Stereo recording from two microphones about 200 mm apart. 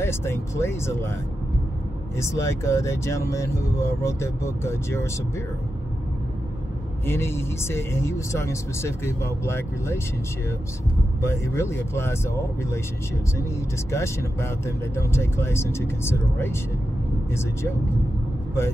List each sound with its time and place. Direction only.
0.0 s speech: 15° left (ahead or behind)
2.1 s speech: 15° left (ahead or behind)
7.1 s speech: 10° left (ahead or behind)
11.1 s speech: 15° left (ahead or behind)
13.9 s speech: 15° left (ahead or behind)